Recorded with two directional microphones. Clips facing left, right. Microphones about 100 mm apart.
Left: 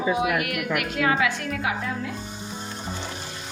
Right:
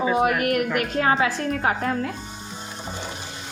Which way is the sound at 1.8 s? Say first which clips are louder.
Right 5 dB; 55° right (ahead or behind).